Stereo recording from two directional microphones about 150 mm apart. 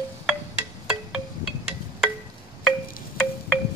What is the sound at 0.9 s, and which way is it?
Music, 5° right (ahead or behind).